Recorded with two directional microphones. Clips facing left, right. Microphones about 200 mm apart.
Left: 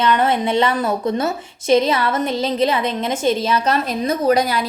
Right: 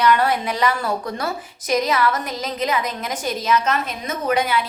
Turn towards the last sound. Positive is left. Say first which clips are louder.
# left 4 dB
turn(degrees=35)  # may be behind; listen again after turning